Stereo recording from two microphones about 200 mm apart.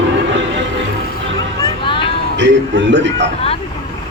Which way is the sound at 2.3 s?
60° right (ahead or behind).